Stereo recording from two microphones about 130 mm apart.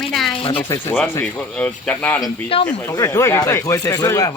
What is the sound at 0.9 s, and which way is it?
Speech, 15° left (ahead or behind).